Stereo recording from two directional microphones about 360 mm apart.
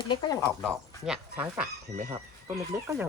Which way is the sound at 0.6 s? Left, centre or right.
Centre.